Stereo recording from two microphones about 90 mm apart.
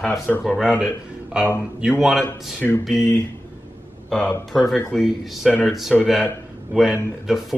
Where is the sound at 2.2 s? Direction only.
25° left (ahead or behind).